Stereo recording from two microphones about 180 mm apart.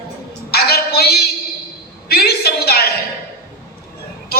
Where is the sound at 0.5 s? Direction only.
60° left (ahead or behind).